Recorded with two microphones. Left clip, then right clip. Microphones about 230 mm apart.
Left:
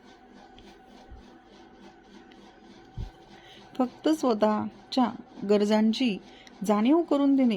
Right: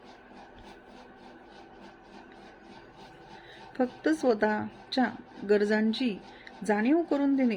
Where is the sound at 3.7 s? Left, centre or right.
Left.